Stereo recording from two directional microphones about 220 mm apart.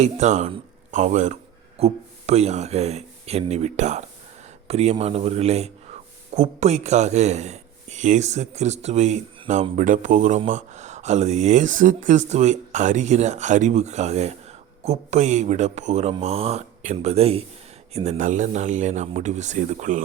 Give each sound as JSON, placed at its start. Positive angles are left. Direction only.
{"t": 0.0, "sound": "a man's voice", "side_deg": -30}